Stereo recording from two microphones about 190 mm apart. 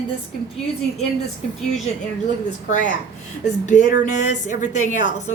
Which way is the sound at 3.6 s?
40° left (ahead or behind).